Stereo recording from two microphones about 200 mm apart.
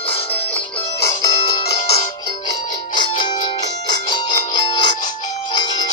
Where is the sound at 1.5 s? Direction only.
30° left (ahead or behind).